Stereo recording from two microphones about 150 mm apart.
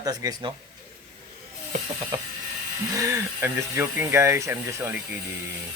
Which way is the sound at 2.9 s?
20° right (ahead or behind).